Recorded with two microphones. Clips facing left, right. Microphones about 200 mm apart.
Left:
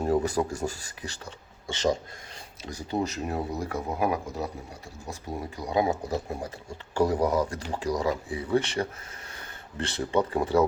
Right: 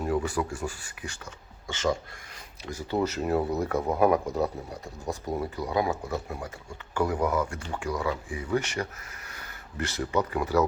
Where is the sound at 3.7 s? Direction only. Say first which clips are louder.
Right 6 dB; 35° right (ahead or behind).